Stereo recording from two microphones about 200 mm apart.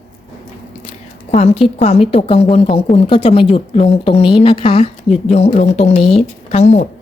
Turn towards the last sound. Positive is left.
turn(degrees=35)  # may be behind; listen again after turning